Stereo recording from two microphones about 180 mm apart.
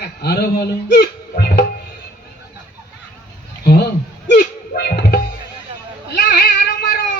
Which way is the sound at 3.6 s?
60° left (ahead or behind).